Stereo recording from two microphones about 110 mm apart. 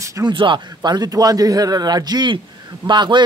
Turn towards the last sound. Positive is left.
turn(degrees=-45)  # may be behind; listen again after turning